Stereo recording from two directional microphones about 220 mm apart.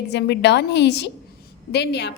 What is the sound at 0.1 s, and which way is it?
A woman's voice, 50° left (ahead or behind).